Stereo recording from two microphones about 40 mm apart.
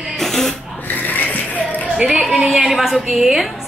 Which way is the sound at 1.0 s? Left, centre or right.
Left.